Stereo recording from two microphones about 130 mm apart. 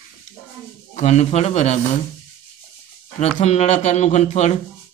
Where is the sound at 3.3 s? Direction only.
60° left (ahead or behind).